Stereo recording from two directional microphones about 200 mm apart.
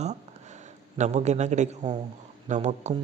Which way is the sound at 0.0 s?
35° right (ahead or behind).